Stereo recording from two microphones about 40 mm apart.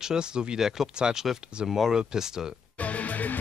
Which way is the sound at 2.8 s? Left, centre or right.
Left.